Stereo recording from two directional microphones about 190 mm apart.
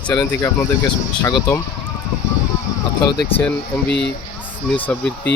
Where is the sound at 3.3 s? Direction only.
10° left (ahead or behind).